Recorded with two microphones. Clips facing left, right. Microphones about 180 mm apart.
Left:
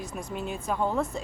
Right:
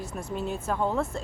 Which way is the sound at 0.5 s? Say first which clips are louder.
Left 1 dB; centre (ahead or behind).